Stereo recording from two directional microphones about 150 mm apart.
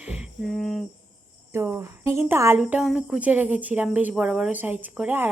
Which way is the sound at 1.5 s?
20° right (ahead or behind).